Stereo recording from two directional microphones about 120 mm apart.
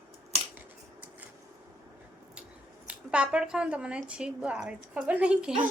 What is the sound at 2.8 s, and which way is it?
A woman's voice, 10° right (ahead or behind).